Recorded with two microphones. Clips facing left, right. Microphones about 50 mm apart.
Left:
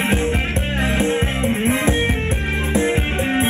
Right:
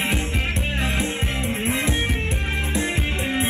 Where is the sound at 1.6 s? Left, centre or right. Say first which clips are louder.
Left 5 dB; left.